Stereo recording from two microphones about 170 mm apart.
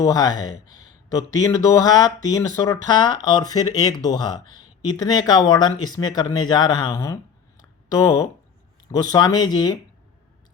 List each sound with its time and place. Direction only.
0.0 s speech: 20° left (ahead or behind)
7.6 s a sound: 25° left (ahead or behind)
9.1 s speech: 25° left (ahead or behind)